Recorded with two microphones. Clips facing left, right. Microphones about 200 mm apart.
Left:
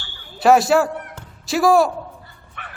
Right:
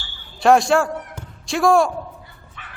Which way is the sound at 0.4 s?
5° left (ahead or behind).